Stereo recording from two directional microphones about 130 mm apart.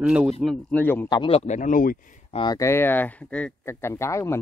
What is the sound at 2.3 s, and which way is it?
Speech, 35° left (ahead or behind).